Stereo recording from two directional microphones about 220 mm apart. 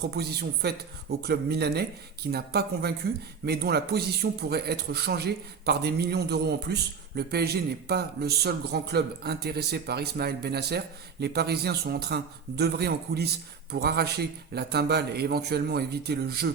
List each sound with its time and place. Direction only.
0.0 s a man's voice: 45° right (ahead or behind)